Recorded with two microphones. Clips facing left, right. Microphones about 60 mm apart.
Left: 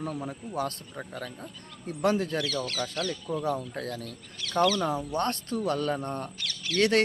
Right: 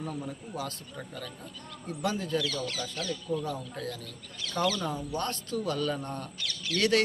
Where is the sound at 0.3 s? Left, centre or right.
Left.